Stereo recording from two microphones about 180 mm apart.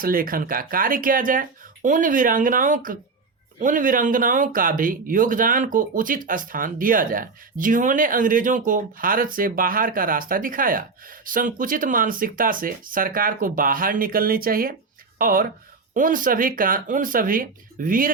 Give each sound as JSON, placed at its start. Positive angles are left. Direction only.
{"t": 0.0, "sound": "speech", "side_deg": -55}